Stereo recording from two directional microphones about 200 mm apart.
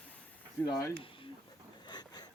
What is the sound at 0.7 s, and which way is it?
Speech, 15° left (ahead or behind).